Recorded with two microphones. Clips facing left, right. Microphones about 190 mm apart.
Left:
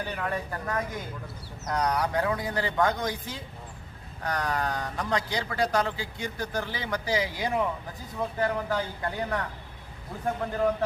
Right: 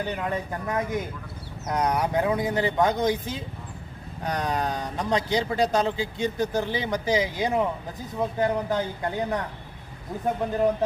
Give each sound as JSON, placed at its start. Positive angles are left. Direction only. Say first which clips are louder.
{"t": 0.0, "sound": "a man's voice", "louder": "right 3 dB", "side_deg": -20}